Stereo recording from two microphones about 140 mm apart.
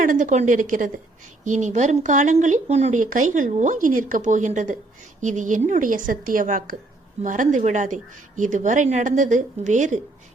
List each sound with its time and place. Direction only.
0.0 s a woman's voice: 70° right (ahead or behind)